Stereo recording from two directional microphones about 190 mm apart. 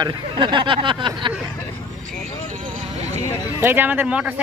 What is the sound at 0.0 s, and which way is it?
Speech, 25° right (ahead or behind).